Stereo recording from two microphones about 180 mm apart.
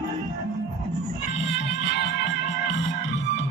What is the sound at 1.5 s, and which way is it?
Music, 85° left.